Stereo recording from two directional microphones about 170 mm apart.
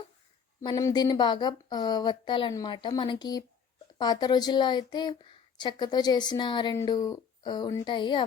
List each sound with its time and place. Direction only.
0.6 s a woman's voice: 20° left (ahead or behind)